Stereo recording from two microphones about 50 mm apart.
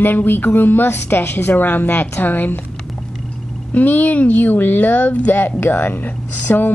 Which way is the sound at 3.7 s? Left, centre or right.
Left.